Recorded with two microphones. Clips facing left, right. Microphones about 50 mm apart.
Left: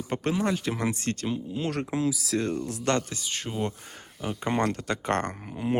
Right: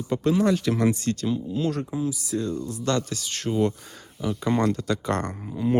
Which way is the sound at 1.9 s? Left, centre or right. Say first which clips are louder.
Even; left.